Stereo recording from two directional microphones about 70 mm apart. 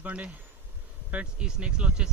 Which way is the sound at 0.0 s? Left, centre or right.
Centre.